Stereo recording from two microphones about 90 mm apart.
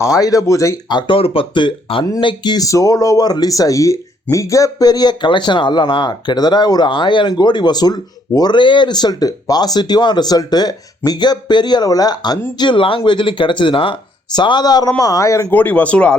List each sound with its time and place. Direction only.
0.0 s speech: 40° left (ahead or behind)
0.9 s speech: 55° left (ahead or behind)
1.1 s speech: 90° left; by 2.0 s 65° left (ahead or behind)
2.2 s speech: 55° left (ahead or behind)
2.6 s speech: 40° left (ahead or behind)
12.5 s speech: 65° left (ahead or behind)
13.0 s speech: 60° left (ahead or behind); by 14.0 s 75° left (ahead or behind)
14.3 s speech: 55° left (ahead or behind); by 15.4 s 35° left (ahead or behind)
15.4 s speech: 20° left (ahead or behind)